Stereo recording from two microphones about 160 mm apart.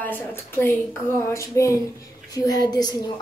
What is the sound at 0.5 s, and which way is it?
A woman's voice, 15° left (ahead or behind).